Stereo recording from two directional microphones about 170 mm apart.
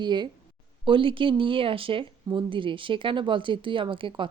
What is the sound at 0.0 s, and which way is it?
A woman's voice, 25° right (ahead or behind).